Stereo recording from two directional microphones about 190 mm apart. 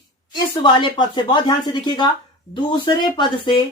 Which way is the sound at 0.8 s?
25° left (ahead or behind).